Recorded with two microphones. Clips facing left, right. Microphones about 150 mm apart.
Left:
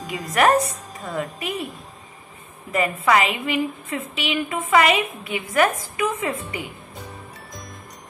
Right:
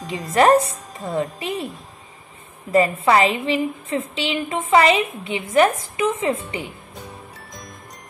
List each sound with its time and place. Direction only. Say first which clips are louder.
0.0 s a woman's voice: right 3 dB; 25° right (ahead or behind)
2.7 s a woman's voice: right 3 dB; 30° right (ahead or behind)